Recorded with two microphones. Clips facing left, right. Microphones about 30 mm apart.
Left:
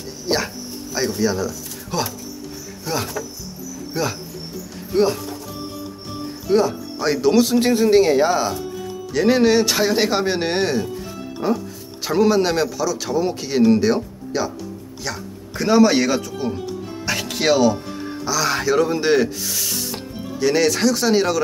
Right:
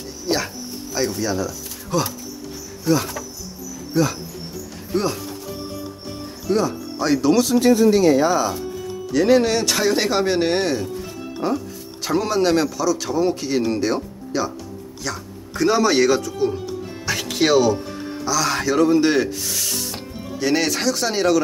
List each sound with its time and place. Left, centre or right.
0.9 s speech: centre
4.9 s speech: centre
6.4 s speech: centre
9.1 s speech: centre
17.1 s music: centre
18.2 s speech: centre